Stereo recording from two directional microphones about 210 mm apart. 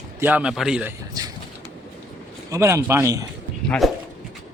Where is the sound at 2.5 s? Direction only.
15° right (ahead or behind).